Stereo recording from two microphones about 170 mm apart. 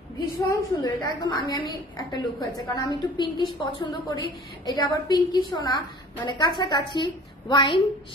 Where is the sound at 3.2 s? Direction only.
25° left (ahead or behind).